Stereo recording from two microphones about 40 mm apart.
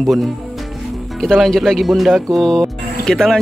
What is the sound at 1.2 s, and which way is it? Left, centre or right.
Speech, centre.